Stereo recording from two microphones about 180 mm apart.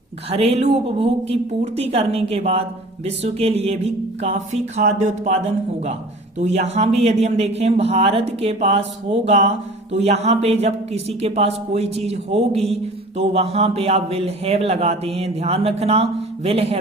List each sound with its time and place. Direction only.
0.3 s a man's voice: 35° right (ahead or behind)
6.4 s a man's voice: 40° right (ahead or behind)